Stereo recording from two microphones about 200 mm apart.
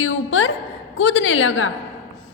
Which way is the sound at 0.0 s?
75° left (ahead or behind).